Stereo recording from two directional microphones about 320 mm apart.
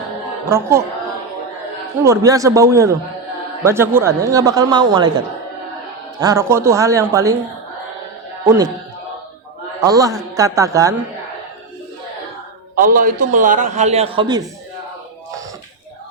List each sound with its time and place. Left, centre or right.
0.4 s speech: centre
2.0 s speech: centre
6.1 s speech: centre
8.4 s speech: centre
9.8 s speech: centre
12.7 s a man's voice: right